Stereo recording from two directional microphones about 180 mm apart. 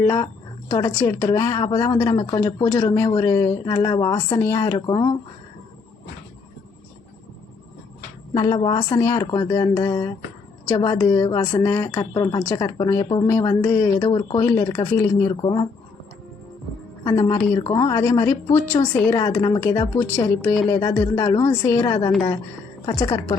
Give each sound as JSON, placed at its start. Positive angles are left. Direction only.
{"t": 0.7, "sound": "a woman's voice", "side_deg": 15}
{"t": 8.3, "sound": "speech", "side_deg": 25}
{"t": 8.9, "sound": "a woman's voice", "side_deg": 15}
{"t": 14.1, "sound": "speech", "side_deg": 25}
{"t": 14.4, "sound": "a woman's voice", "side_deg": 15}
{"t": 17.0, "sound": "speech", "side_deg": 25}
{"t": 18.8, "sound": "a woman's voice", "side_deg": 25}